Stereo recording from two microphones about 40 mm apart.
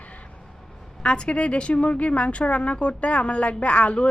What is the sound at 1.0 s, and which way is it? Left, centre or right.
A woman's voice, left.